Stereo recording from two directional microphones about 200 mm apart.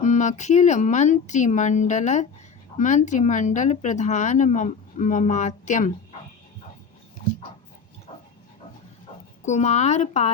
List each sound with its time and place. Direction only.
0.0 s speech: 35° left (ahead or behind)
9.4 s speech: 35° left (ahead or behind)